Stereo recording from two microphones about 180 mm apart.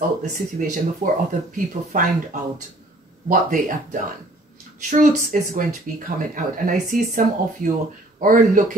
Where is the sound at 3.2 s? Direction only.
50° right (ahead or behind).